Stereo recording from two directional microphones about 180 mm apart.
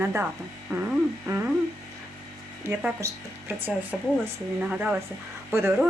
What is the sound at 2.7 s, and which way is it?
Speech, 15° right (ahead or behind).